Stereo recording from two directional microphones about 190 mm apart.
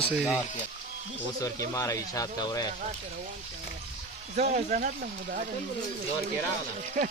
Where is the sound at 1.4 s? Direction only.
15° left (ahead or behind).